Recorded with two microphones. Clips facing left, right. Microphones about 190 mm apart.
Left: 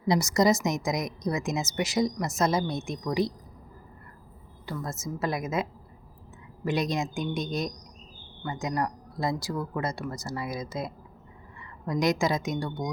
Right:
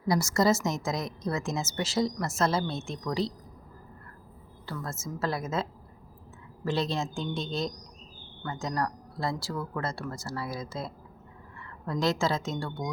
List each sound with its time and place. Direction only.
0.0 s a woman's voice: 20° left (ahead or behind)
4.6 s a woman's voice: 15° left (ahead or behind)
6.7 s a woman's voice: 15° left (ahead or behind)